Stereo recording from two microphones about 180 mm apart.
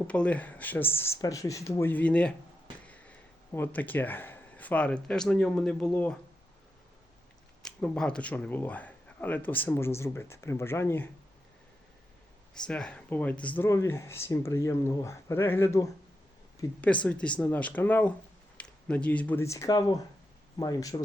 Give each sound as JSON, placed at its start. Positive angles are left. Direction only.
{"t": 0.1, "sound": "speech", "side_deg": 5}
{"t": 7.6, "sound": "speech", "side_deg": 5}
{"t": 12.5, "sound": "speech", "side_deg": 5}